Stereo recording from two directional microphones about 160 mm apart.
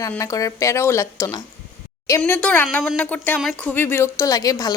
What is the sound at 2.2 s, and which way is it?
Speech, 5° left (ahead or behind).